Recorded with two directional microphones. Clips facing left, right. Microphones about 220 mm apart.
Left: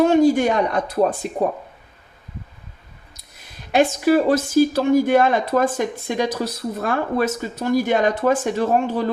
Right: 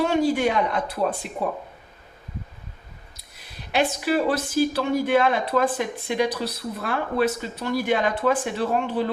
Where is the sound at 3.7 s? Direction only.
45° left (ahead or behind).